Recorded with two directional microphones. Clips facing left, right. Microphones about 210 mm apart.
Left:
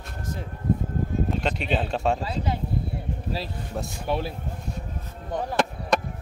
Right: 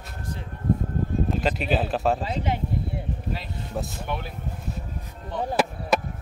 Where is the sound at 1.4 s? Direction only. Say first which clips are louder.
Right 2 dB; 5° right (ahead or behind).